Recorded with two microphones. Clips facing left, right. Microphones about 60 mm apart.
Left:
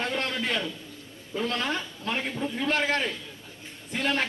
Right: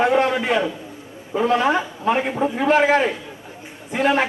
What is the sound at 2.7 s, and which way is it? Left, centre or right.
A man's voice, centre.